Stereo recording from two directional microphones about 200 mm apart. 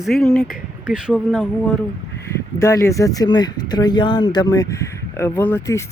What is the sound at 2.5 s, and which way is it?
Speech, 15° left (ahead or behind).